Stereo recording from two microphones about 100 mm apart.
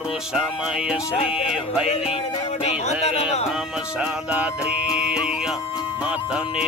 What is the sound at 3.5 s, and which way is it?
Music, 10° right (ahead or behind).